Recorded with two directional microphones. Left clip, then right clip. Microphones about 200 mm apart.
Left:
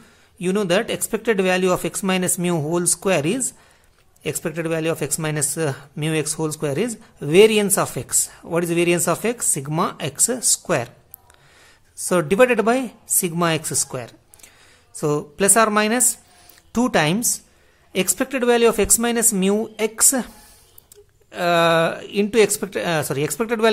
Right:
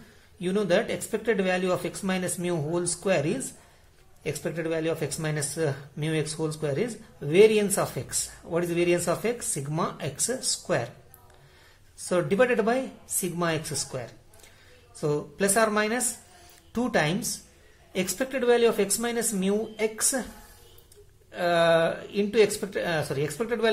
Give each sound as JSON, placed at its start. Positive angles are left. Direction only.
{"t": 0.4, "sound": "speech", "side_deg": 40}
{"t": 12.0, "sound": "speech", "side_deg": 40}
{"t": 21.3, "sound": "speech", "side_deg": 40}